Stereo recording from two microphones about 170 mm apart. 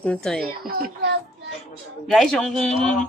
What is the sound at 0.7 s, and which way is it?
Speech, 70° right (ahead or behind).